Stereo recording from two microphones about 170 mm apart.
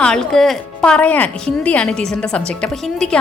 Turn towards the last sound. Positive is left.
turn(degrees=5)  # may be behind; listen again after turning